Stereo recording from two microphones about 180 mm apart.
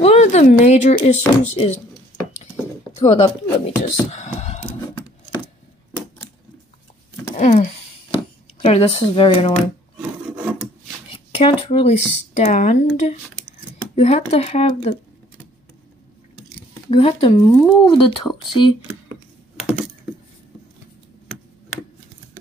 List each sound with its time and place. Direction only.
0.0 s speech: 35° left (ahead or behind)
3.0 s speech: 35° left (ahead or behind)
3.5 s beatboxing: 35° left (ahead or behind)
7.3 s a sound: 40° left (ahead or behind)
11.3 s speech: 30° left (ahead or behind)
16.9 s speech: 35° left (ahead or behind)
17.4 s speech: 15° left (ahead or behind)
17.8 s speech: 25° left (ahead or behind)